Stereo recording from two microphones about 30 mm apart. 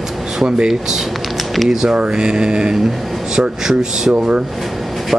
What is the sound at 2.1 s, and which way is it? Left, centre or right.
Speech, right.